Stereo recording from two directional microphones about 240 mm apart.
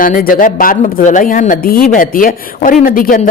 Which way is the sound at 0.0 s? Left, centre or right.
Left.